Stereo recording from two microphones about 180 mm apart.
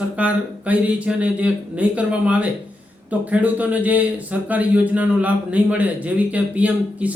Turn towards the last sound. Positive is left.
turn(degrees=-10)  # may be behind; listen again after turning